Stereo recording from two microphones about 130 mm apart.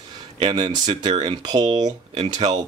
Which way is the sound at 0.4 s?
40° right (ahead or behind).